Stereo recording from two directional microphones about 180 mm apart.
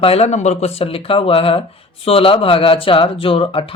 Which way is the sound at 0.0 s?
35° left (ahead or behind).